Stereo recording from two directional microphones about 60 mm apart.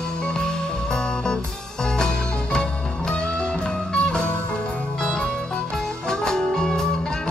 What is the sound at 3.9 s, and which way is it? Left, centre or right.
Music, centre.